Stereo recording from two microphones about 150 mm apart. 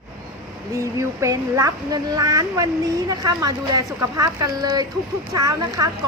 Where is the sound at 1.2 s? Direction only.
20° right (ahead or behind).